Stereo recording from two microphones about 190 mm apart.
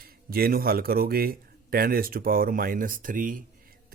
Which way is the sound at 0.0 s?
50° right (ahead or behind).